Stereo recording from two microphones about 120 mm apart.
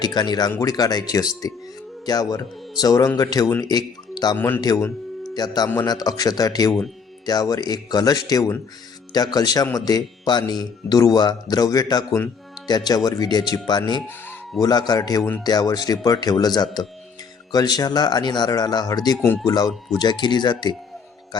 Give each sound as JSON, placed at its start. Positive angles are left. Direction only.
{"t": 0.0, "sound": "speech", "side_deg": 35}
{"t": 4.4, "sound": "speech", "side_deg": 15}
{"t": 4.6, "sound": "speech", "side_deg": 35}